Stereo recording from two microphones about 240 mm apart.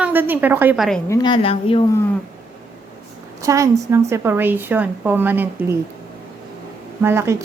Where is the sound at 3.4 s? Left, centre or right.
Centre.